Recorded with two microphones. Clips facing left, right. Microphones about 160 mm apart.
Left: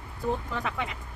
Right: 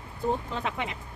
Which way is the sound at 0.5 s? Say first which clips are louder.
Even; 25° right (ahead or behind).